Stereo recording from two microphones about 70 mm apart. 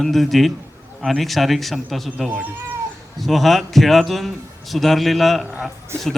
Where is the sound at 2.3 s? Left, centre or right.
Right.